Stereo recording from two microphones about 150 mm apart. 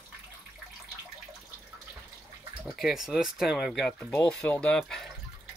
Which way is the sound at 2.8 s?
Centre (ahead or behind).